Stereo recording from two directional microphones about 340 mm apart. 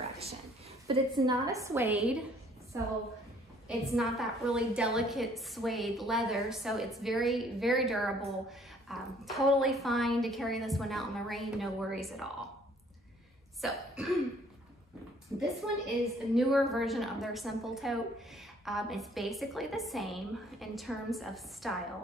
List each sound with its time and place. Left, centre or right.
0.0 s a sound: centre
0.8 s a woman's voice: centre
3.6 s a woman's voice: centre
13.6 s speech: centre
15.3 s a woman's voice: centre